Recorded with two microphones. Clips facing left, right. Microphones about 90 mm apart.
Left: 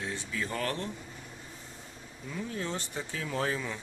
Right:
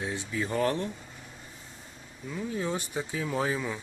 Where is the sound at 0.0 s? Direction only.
15° right (ahead or behind).